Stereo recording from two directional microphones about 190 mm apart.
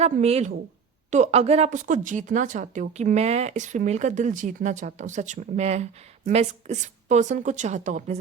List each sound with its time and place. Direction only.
0.0 s speech: 35° right (ahead or behind)